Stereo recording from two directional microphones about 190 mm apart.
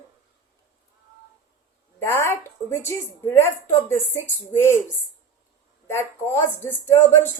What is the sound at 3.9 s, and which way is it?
Speech, 15° left (ahead or behind).